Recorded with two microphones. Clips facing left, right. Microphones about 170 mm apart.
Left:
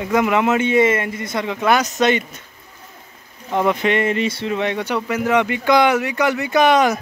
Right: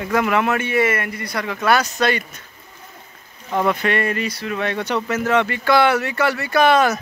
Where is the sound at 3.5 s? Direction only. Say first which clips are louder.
Left 2 dB; 15° left (ahead or behind).